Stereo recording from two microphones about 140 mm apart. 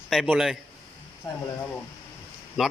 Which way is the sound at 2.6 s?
5° right (ahead or behind).